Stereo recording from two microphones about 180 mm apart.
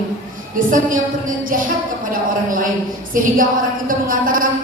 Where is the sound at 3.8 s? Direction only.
50° right (ahead or behind).